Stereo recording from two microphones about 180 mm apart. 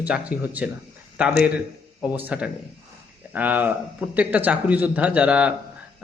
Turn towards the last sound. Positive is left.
turn(degrees=-5)  # may be behind; listen again after turning